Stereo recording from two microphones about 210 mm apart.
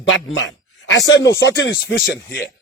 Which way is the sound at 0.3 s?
60° left (ahead or behind).